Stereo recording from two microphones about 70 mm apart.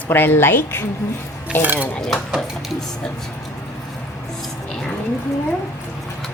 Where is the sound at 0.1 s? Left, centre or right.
Left.